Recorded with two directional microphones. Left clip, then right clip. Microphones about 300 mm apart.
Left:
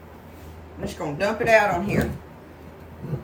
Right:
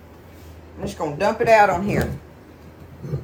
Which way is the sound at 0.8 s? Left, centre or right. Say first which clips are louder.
Right 4 dB; centre.